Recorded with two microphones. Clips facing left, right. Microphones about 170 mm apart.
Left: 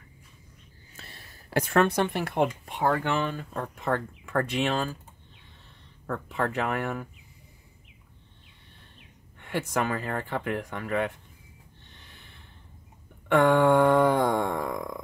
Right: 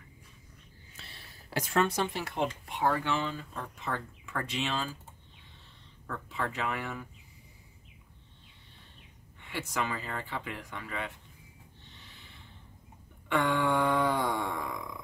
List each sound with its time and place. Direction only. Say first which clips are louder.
0.9 s a sound: left 4 dB; 45° left (ahead or behind)
2.9 s speech: left 5 dB; 55° left (ahead or behind)
6.0 s speech: left 7 dB; 50° left (ahead or behind)
9.4 s speech: left 6 dB; 55° left (ahead or behind)
13.3 s speech: left 8 dB; 55° left (ahead or behind)